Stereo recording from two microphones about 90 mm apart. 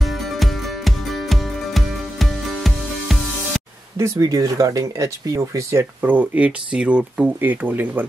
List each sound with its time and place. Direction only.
0.4 s music: centre (ahead or behind)
4.2 s speech: 40° right (ahead or behind)
6.0 s speech: 15° right (ahead or behind)